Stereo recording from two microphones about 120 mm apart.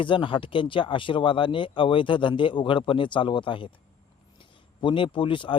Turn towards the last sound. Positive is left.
turn(degrees=45)  # may be behind; listen again after turning